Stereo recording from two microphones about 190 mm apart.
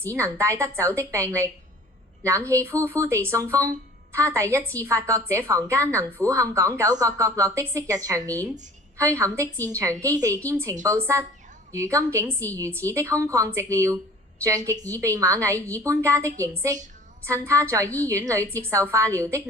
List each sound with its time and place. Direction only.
0.1 s speech: 15° right (ahead or behind)